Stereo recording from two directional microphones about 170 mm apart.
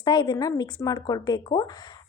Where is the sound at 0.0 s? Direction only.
25° left (ahead or behind).